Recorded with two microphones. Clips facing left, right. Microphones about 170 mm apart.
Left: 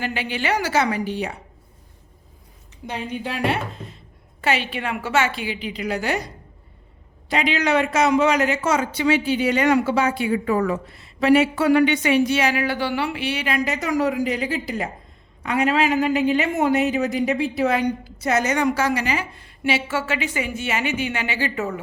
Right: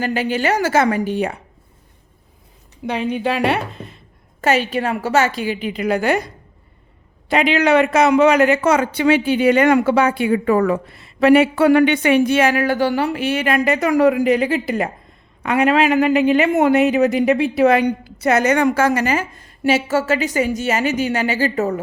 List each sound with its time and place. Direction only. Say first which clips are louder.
0.0 s a woman's voice: right 6 dB; 45° right (ahead or behind)
2.8 s a woman's voice: right 8 dB; 70° right (ahead or behind)
4.4 s a woman's voice: right 6 dB; 45° right (ahead or behind)